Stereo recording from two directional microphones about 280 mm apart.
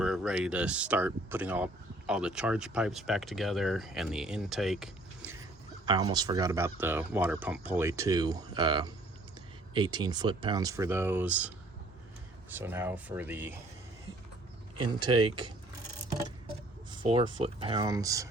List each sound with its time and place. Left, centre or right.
0.0 s speech: centre
5.8 s speech: centre
14.8 s speech: centre